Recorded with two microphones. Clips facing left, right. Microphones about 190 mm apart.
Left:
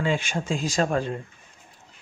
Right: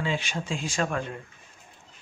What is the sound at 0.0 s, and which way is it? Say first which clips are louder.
Speech: left 4 dB; 50° left (ahead or behind).